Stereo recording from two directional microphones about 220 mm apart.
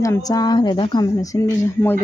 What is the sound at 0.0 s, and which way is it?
A woman's voice, 15° left (ahead or behind).